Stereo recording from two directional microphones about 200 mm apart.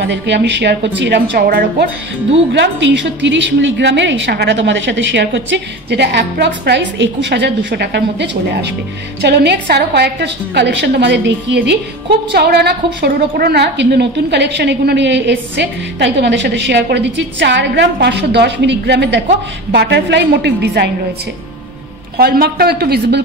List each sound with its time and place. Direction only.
0.0 s a woman's voice: 60° right (ahead or behind)
22.1 s a woman's voice: 50° right (ahead or behind)